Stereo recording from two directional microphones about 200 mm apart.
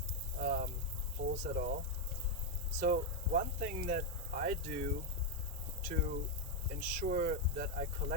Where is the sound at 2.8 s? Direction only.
40° right (ahead or behind).